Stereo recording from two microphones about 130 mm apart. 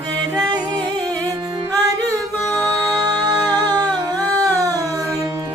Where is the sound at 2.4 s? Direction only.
Centre (ahead or behind).